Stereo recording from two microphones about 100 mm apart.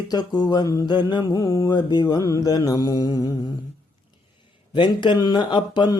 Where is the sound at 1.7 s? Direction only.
45° left (ahead or behind).